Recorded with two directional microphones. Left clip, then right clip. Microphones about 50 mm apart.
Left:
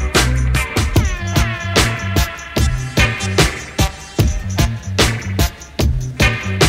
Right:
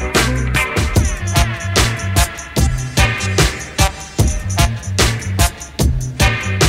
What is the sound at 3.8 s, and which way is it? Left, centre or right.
Music, right.